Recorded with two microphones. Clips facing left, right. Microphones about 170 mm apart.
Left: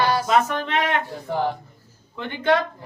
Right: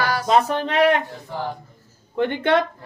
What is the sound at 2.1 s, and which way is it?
Speech, 60° right (ahead or behind).